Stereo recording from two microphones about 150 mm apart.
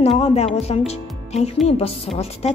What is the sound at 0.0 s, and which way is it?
A woman's voice, 40° left (ahead or behind).